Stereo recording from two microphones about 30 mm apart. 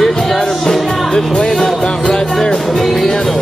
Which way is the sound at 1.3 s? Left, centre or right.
Centre.